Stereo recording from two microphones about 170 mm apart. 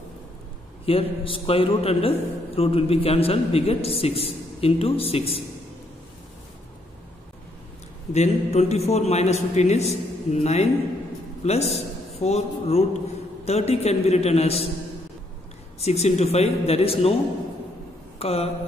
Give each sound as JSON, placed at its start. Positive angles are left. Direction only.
{"t": 0.8, "sound": "a man's voice", "side_deg": 35}
{"t": 8.1, "sound": "a man's voice", "side_deg": 40}
{"t": 15.8, "sound": "a man's voice", "side_deg": 40}
{"t": 18.2, "sound": "a man's voice", "side_deg": 35}